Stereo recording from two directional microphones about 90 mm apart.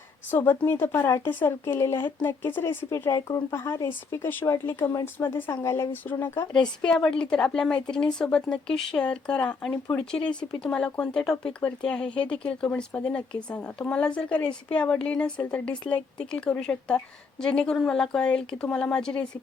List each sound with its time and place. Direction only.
0.3 s a woman's voice: 20° left (ahead or behind)
4.4 s a woman's voice: 35° left (ahead or behind)
6.6 s speech: 10° left (ahead or behind)